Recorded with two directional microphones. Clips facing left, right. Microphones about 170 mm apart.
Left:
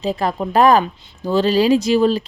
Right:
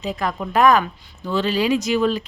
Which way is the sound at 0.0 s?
30° left (ahead or behind).